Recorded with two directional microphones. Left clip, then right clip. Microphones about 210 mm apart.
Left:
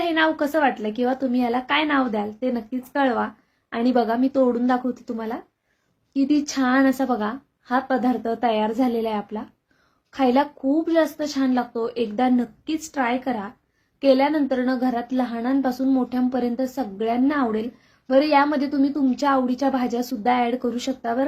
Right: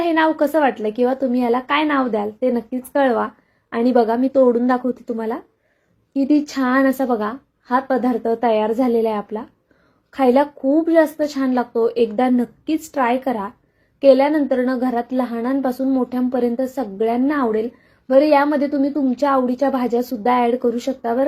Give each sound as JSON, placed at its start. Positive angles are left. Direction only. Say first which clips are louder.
{"t": 0.0, "sound": "a woman's voice", "louder": "right 4 dB", "side_deg": 0}